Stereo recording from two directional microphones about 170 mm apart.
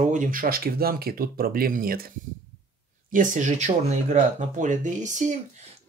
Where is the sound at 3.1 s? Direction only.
50° right (ahead or behind).